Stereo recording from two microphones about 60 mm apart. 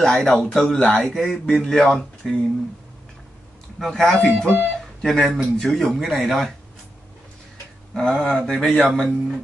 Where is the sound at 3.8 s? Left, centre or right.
Centre.